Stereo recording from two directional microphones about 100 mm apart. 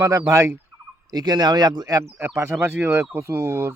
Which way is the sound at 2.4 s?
25° right (ahead or behind).